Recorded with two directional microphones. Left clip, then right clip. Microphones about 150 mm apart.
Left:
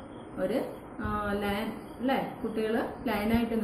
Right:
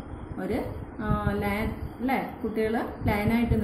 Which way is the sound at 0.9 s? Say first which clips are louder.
Right 2 dB; 30° right (ahead or behind).